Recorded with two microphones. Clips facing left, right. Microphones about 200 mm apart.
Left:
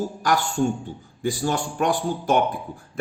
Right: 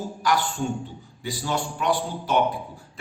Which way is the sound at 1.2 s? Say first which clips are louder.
Left 4 dB; 50° left (ahead or behind).